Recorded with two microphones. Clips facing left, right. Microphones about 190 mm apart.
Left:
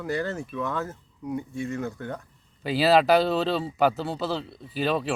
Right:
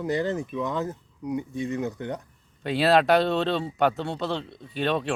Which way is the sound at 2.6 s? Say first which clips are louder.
Left 1 dB; centre (ahead or behind).